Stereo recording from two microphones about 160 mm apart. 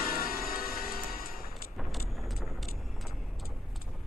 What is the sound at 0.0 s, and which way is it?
Music, 65° left (ahead or behind).